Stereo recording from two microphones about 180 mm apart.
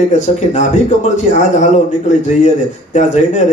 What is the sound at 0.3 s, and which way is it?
Speech, 40° left (ahead or behind).